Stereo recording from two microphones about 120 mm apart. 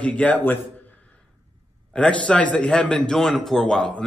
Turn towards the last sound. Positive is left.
turn(degrees=5)  # may be behind; listen again after turning